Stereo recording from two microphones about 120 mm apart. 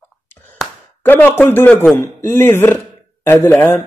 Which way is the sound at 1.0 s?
15° left (ahead or behind).